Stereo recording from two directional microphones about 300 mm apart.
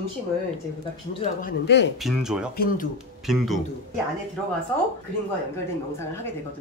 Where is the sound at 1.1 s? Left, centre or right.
Left.